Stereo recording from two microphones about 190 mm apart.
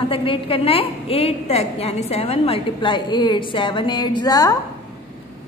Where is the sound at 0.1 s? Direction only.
30° left (ahead or behind).